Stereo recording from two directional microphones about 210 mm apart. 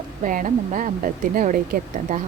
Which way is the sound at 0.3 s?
40° right (ahead or behind).